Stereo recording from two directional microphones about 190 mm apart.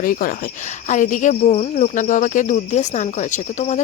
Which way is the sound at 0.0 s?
45° left (ahead or behind).